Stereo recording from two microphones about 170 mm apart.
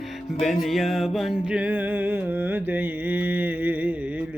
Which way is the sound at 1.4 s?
5° right (ahead or behind).